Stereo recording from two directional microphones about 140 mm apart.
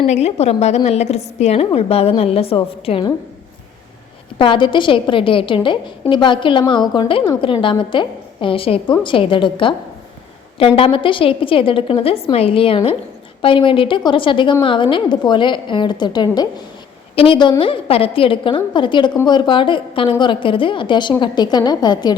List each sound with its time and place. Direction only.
0.1 s a woman's voice: 50° left (ahead or behind)
4.4 s a woman's voice: 35° left (ahead or behind)